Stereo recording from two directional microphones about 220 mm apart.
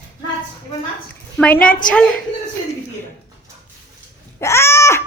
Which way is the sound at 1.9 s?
Centre (ahead or behind).